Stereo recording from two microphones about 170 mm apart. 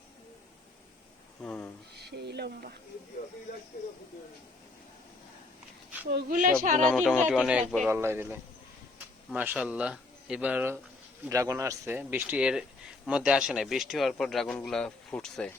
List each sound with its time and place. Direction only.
1.4 s a sound: 10° left (ahead or behind)
2.0 s speech: 70° right (ahead or behind)
6.3 s speech: 50° right (ahead or behind)
6.8 s speech: centre (ahead or behind)
7.9 s speech: 15° right (ahead or behind); by 15.5 s 5° left (ahead or behind)